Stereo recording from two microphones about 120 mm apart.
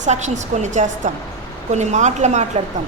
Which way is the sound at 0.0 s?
75° right (ahead or behind).